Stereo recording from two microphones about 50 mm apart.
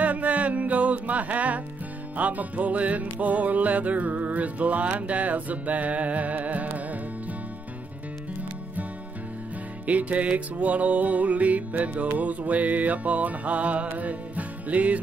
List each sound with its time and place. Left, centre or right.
0.0 s music: right
9.8 s music: right